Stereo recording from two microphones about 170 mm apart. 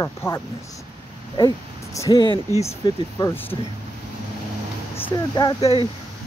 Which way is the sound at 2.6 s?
35° left (ahead or behind).